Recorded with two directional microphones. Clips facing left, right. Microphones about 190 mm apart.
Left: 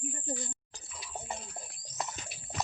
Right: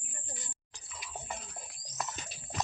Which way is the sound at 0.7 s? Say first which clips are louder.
Left 2 dB; 25° left (ahead or behind).